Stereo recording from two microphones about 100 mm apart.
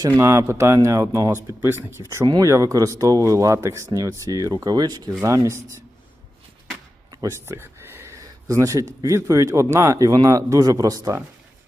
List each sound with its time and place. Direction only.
0.2 s speech: 30° right (ahead or behind)
5.2 s speech: 30° right (ahead or behind)
7.3 s speech: 25° right (ahead or behind)